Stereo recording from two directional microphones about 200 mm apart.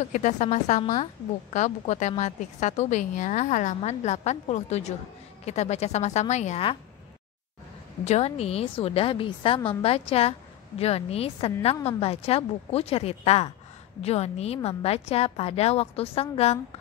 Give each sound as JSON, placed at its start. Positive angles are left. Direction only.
{"t": 0.1, "sound": "a woman's voice", "side_deg": 35}
{"t": 8.0, "sound": "a woman's voice", "side_deg": 30}